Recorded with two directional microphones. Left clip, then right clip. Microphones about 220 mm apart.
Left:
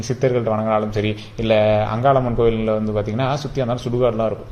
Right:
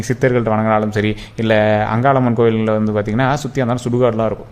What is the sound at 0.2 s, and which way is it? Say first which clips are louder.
Speech: right 3 dB; 30° right (ahead or behind).